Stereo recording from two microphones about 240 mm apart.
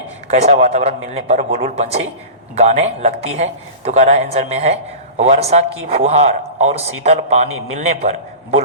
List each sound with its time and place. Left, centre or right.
0.3 s a man's voice: right